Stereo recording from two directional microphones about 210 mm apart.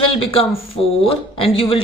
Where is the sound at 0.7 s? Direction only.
25° left (ahead or behind).